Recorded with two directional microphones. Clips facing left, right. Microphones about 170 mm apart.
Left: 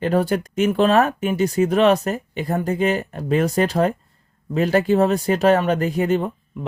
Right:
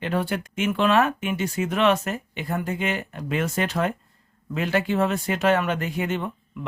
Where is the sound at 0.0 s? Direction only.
40° left (ahead or behind).